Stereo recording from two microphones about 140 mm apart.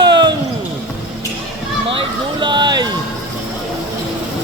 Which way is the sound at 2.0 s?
35° right (ahead or behind).